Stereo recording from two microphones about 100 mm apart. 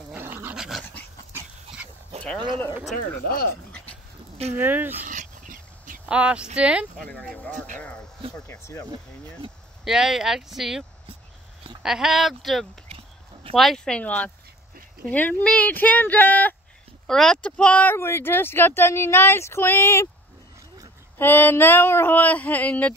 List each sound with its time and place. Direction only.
0.1 s dog: 20° right (ahead or behind)
0.6 s dog: centre (ahead or behind)
4.6 s speech: 20° right (ahead or behind)
6.0 s speech: 10° right (ahead or behind)
7.1 s speech: 10° left (ahead or behind)
8.5 s speech: 30° left (ahead or behind)
9.8 s speech: 5° right (ahead or behind)
12.9 s a sound: 70° right (ahead or behind)
13.6 s speech: 5° left (ahead or behind)
17.1 s speech: 5° left (ahead or behind)
17.9 s speech: 25° left (ahead or behind)
21.2 s speech: 20° left (ahead or behind)